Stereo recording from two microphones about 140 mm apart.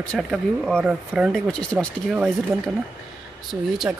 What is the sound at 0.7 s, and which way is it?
Speech, 10° right (ahead or behind).